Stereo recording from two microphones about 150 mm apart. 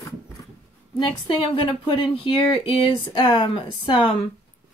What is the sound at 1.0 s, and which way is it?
A woman's voice, 35° left (ahead or behind).